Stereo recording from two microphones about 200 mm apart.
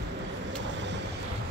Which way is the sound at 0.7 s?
65° right (ahead or behind).